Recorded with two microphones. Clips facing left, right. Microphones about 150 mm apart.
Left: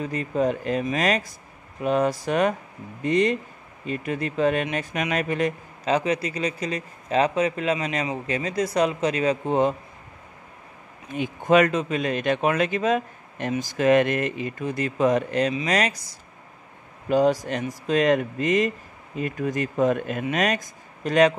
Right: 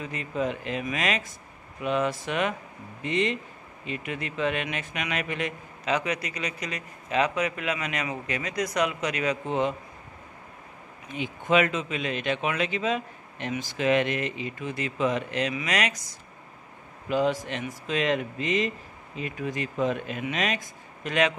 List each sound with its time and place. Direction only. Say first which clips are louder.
0.0 s speech: left 6 dB; 40° left (ahead or behind)
11.1 s speech: left 5 dB; 45° left (ahead or behind)
17.1 s speech: left 5 dB; 40° left (ahead or behind)